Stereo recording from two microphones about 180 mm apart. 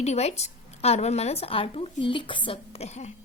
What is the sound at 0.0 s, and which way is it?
A woman's voice, 35° left (ahead or behind).